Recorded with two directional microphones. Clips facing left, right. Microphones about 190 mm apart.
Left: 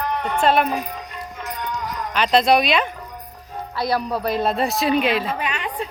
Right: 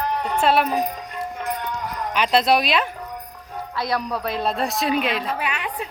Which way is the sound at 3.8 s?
30° left (ahead or behind).